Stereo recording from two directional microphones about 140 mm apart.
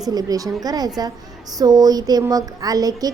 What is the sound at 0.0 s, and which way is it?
A woman's voice, 25° right (ahead or behind).